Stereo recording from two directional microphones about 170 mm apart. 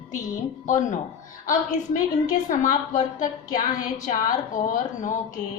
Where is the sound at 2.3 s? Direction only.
50° left (ahead or behind).